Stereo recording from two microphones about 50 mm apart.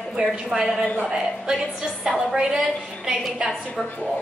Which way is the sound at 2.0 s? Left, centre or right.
Centre.